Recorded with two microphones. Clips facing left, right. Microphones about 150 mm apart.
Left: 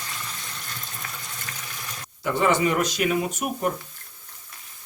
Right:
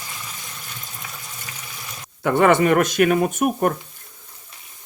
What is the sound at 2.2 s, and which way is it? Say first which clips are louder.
Speech: right 6 dB; 60° right (ahead or behind).